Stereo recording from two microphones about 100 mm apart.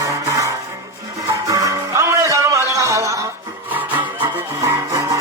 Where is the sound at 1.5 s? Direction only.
35° right (ahead or behind).